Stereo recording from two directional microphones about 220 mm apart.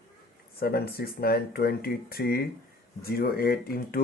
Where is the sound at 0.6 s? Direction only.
45° left (ahead or behind).